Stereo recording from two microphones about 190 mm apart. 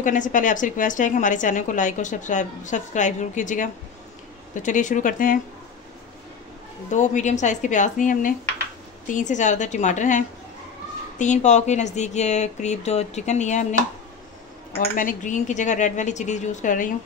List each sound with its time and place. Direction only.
0.0 s a woman's voice: 45° left (ahead or behind)
6.9 s a woman's voice: 40° left (ahead or behind)
14.8 s a woman's voice: 45° left (ahead or behind)